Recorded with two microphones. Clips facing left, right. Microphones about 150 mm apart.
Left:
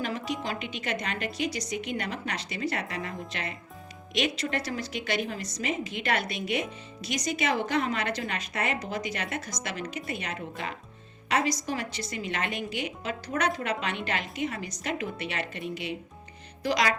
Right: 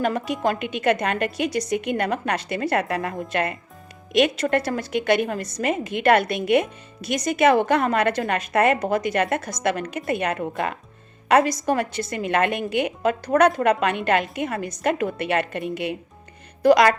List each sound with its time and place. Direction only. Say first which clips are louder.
0.0 s a woman's voice: right 9 dB; 55° right (ahead or behind)